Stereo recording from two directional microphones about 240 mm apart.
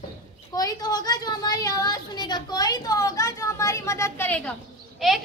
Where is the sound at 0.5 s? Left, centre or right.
Centre.